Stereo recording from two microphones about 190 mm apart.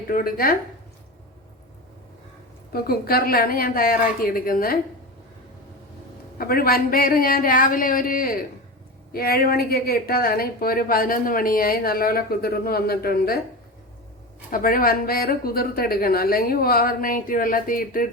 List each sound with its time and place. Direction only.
0.1 s a woman's voice: 50° left (ahead or behind)
2.7 s a woman's voice: 55° left (ahead or behind)
6.4 s a woman's voice: 50° left (ahead or behind)
14.5 s a woman's voice: 50° left (ahead or behind)